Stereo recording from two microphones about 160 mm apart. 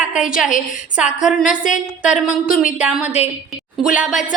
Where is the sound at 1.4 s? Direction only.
55° left (ahead or behind).